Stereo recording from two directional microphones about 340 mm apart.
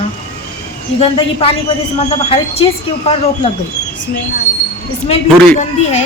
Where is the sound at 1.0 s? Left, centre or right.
Centre.